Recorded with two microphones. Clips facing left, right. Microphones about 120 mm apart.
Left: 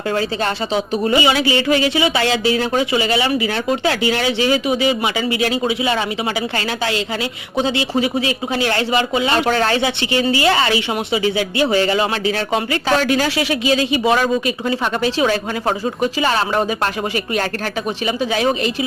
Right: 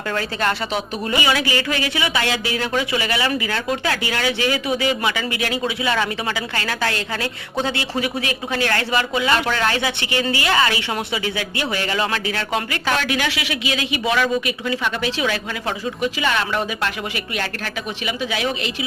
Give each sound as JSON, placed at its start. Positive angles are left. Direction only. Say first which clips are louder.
{"t": 0.1, "sound": "speech", "louder": "left 2 dB", "side_deg": 30}
{"t": 18.0, "sound": "speech", "louder": "left 6 dB", "side_deg": 40}